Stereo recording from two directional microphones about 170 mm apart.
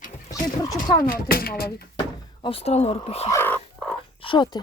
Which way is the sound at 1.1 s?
60° left (ahead or behind).